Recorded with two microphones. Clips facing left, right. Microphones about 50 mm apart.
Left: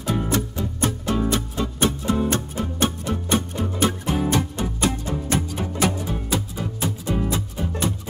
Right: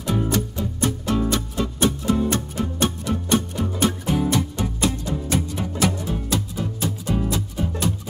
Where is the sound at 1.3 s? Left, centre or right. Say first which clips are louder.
Even; left.